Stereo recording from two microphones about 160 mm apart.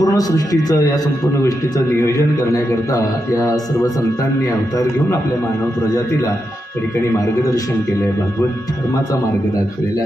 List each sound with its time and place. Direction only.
0.0 s a man's voice: 25° left (ahead or behind)